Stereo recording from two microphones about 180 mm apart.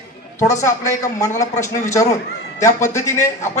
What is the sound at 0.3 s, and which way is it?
A man's voice, 15° left (ahead or behind).